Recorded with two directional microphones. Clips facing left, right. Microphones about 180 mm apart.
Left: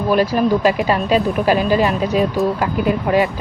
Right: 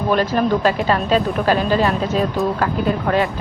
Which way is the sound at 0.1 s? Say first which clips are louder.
Left 2 dB; 10° left (ahead or behind).